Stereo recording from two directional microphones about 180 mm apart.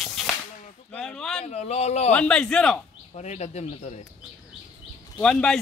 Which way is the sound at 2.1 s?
5° left (ahead or behind).